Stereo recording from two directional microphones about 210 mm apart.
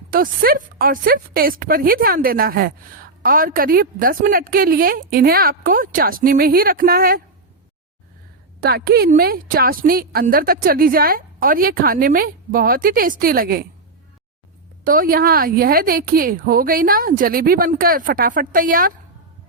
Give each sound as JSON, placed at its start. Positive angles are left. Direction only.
{"t": 0.1, "sound": "a woman's voice", "side_deg": -45}
{"t": 8.6, "sound": "a woman's voice", "side_deg": -50}
{"t": 14.8, "sound": "a woman's voice", "side_deg": -40}